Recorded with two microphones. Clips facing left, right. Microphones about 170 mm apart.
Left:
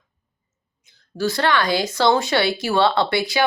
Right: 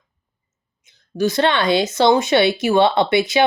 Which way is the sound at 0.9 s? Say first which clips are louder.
Right 4 dB; 20° right (ahead or behind).